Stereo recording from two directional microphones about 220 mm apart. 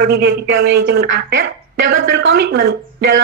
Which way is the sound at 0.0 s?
45° right (ahead or behind).